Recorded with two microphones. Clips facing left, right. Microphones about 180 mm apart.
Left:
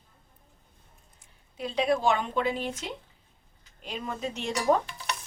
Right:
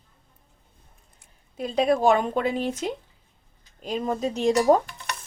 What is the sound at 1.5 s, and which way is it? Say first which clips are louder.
Speech: right 4 dB; 45° right (ahead or behind).